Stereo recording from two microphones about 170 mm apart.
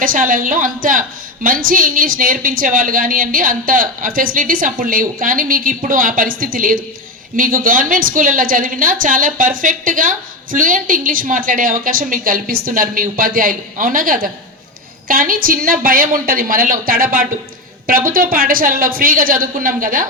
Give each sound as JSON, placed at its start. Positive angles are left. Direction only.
{"t": 0.0, "sound": "a woman's voice", "side_deg": -55}